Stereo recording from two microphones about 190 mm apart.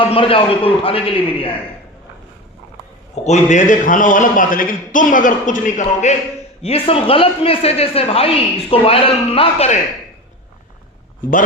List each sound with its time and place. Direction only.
0.0 s a man's voice: 30° left (ahead or behind)
3.2 s a man's voice: 40° left (ahead or behind)